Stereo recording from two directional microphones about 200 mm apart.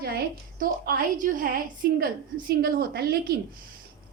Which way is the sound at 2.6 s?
50° right (ahead or behind).